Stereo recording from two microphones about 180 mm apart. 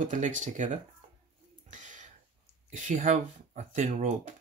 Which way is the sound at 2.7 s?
45° right (ahead or behind).